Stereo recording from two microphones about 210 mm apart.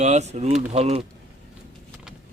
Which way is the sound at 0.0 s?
35° right (ahead or behind).